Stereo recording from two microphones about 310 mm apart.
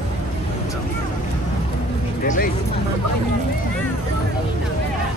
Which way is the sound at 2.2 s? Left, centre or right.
Left.